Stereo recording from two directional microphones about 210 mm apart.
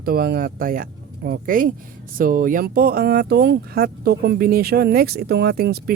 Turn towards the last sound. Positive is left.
turn(degrees=-50)  # may be behind; listen again after turning